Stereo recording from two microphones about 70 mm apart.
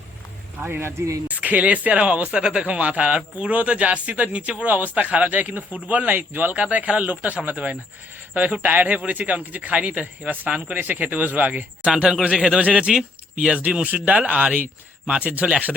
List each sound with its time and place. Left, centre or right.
0.6 s a man's voice: right
1.3 s speech: right
12.2 s speech: centre